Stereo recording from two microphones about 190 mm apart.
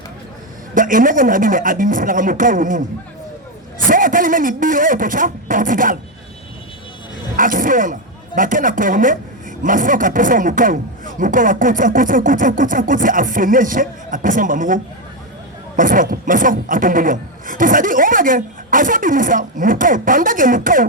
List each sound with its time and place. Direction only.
0.7 s speech: 45° right (ahead or behind)
7.3 s speech: 45° right (ahead or behind)